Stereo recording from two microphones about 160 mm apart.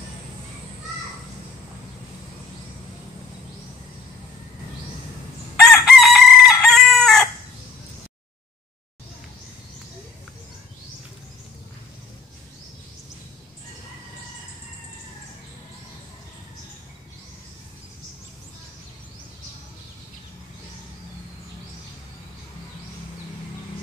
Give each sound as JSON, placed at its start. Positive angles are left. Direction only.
{"t": 5.6, "sound": "chicken", "side_deg": 0}